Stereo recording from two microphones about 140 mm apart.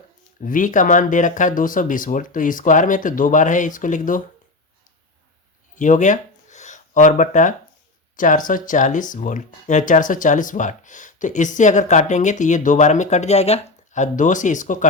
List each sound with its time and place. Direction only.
0.4 s speech: 70° left (ahead or behind)
5.7 s a sound: 65° left (ahead or behind)
8.1 s speech: 70° left (ahead or behind)